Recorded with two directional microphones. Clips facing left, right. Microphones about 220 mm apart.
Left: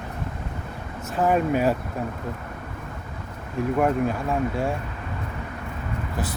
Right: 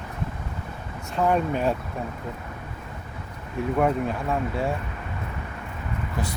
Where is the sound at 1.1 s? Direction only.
5° left (ahead or behind).